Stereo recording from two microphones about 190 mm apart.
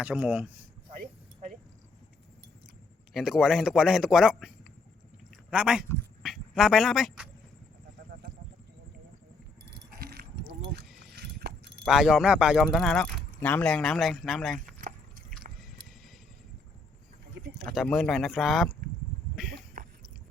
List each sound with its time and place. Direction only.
0.0 s speech: 5° right (ahead or behind)
0.9 s a sound: 40° right (ahead or behind)
3.1 s speech: centre (ahead or behind)
9.6 s keys jangling: 55° right (ahead or behind)
10.6 s a sound: 60° right (ahead or behind)
11.0 s keys jangling: 55° right (ahead or behind)
11.9 s speech: centre (ahead or behind)
14.8 s drip: 45° right (ahead or behind)
17.6 s speech: centre (ahead or behind)
19.8 s a sound: 45° right (ahead or behind)